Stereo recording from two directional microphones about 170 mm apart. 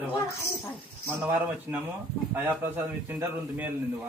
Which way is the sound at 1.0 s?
10° right (ahead or behind).